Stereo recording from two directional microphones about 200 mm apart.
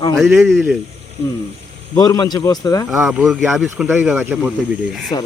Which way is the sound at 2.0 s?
20° left (ahead or behind).